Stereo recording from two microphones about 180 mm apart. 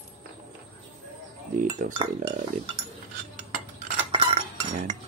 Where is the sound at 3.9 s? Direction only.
30° right (ahead or behind).